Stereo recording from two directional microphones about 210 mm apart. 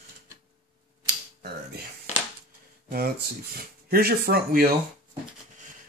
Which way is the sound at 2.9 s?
45° right (ahead or behind).